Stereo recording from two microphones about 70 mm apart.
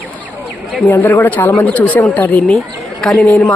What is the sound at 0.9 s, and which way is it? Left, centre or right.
Speech, left.